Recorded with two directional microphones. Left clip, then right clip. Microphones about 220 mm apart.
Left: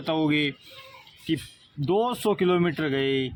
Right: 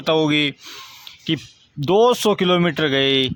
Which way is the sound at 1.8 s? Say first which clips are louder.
Right 9 dB; 35° right (ahead or behind).